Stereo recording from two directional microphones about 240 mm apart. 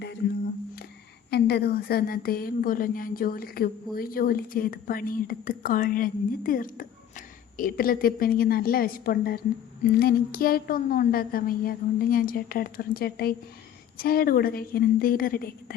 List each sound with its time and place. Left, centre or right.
1.3 s a woman's voice: left